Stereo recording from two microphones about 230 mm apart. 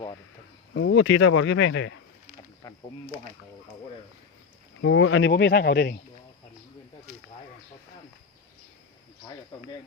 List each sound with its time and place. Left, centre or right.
0.7 s speech: left
2.6 s insect: centre
4.8 s speech: left